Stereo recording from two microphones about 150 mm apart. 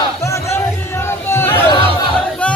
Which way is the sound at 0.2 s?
20° left (ahead or behind).